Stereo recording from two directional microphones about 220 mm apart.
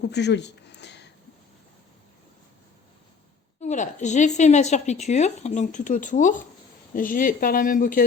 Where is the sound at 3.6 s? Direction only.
35° left (ahead or behind).